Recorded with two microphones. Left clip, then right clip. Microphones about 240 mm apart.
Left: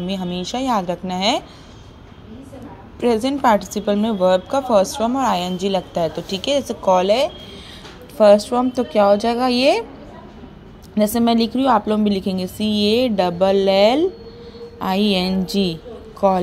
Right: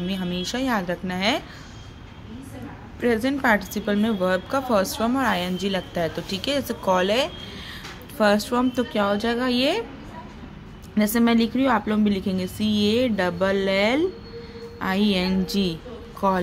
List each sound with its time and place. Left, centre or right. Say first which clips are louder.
0.0 s a woman's voice: left 3 dB; centre
3.0 s a woman's voice: left 5 dB; centre
11.0 s a woman's voice: left 4 dB; centre